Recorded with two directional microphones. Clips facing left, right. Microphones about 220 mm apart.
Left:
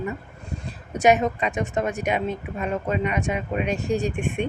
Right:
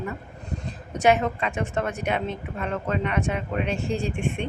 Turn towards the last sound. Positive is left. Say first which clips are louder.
# left 3 dB
turn(degrees=15)  # may be behind; listen again after turning